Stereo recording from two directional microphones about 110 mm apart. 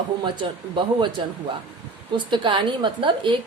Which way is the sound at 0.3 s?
45° right (ahead or behind).